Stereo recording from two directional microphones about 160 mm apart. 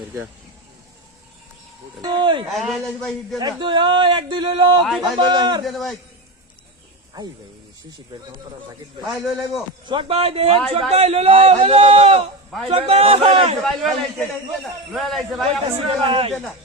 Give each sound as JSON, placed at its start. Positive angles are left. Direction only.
{"t": 2.0, "sound": "a man's voice", "side_deg": -30}
{"t": 2.5, "sound": "a man's voice", "side_deg": 0}
{"t": 3.3, "sound": "a man's voice", "side_deg": -25}
{"t": 4.8, "sound": "a man's voice", "side_deg": 0}
{"t": 5.1, "sound": "a man's voice", "side_deg": -30}
{"t": 5.6, "sound": "a man's voice", "side_deg": 0}
{"t": 9.0, "sound": "a man's voice", "side_deg": 0}
{"t": 9.8, "sound": "a man's voice", "side_deg": -30}
{"t": 13.6, "sound": "a man's voice", "side_deg": 0}
{"t": 16.0, "sound": "a man's voice", "side_deg": -35}